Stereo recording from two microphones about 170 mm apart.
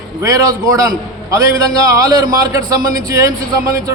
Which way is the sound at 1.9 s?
20° right (ahead or behind).